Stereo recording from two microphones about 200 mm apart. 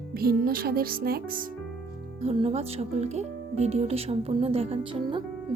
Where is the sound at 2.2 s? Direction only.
30° right (ahead or behind).